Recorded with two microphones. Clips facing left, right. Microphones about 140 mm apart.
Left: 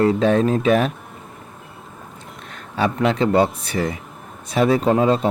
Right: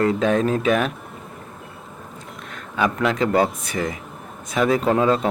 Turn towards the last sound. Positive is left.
turn(degrees=25)  # may be behind; listen again after turning